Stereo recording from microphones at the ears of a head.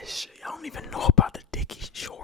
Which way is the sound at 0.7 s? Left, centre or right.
Left.